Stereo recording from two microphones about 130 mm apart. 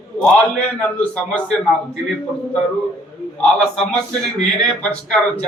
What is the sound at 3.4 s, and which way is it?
A man's voice, 5° left (ahead or behind).